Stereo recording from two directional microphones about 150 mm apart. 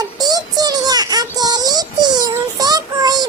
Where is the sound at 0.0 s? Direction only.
25° right (ahead or behind).